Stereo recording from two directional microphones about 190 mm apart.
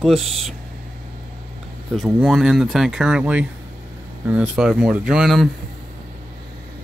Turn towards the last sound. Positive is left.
turn(degrees=0)  # may be behind; listen again after turning